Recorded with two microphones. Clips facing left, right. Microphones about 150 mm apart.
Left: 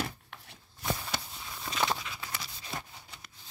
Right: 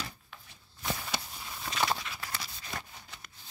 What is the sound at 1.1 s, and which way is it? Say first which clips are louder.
Walk: even; 10° right (ahead or behind).